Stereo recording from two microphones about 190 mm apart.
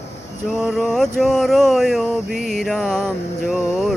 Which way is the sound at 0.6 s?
Centre (ahead or behind).